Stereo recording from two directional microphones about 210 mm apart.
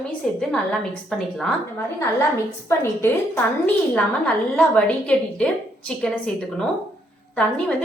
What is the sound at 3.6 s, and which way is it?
A woman's voice, 5° left (ahead or behind).